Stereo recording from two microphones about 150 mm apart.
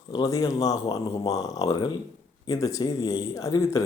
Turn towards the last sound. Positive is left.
turn(degrees=20)  # may be behind; listen again after turning